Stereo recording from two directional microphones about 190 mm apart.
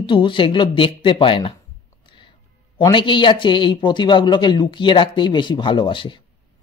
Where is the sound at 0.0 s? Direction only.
25° left (ahead or behind).